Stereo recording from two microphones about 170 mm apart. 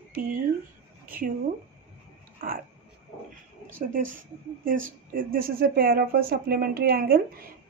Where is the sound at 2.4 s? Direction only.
55° right (ahead or behind).